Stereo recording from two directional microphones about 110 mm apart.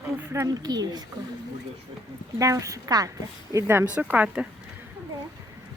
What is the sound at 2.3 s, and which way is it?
Speech, 30° right (ahead or behind).